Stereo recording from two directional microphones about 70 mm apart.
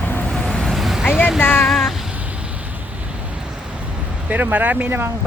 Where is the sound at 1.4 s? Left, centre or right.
Left.